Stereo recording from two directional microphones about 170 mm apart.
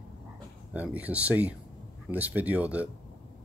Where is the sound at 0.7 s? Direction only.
10° right (ahead or behind).